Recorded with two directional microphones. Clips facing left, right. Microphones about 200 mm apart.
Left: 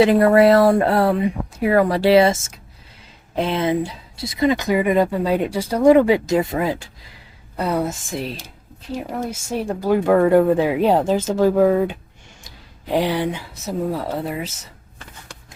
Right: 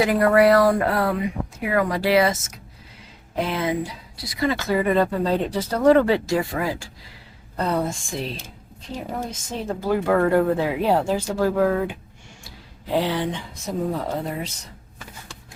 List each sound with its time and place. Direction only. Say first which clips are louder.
0.0 s speech: left 4 dB; 25° left (ahead or behind)
7.5 s speech: left 2 dB; 10° left (ahead or behind)